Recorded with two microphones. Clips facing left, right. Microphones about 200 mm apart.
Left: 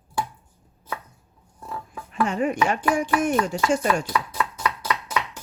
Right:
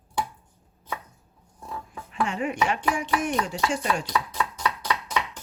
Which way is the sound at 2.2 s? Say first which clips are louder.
Left 4 dB; 45° left (ahead or behind).